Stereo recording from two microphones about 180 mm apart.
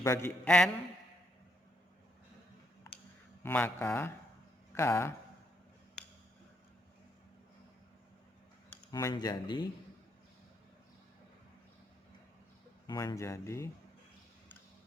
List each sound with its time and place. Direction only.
0.0 s speech: 15° left (ahead or behind)
3.4 s speech: 10° left (ahead or behind)
8.9 s speech: 20° left (ahead or behind)
12.9 s speech: 20° left (ahead or behind)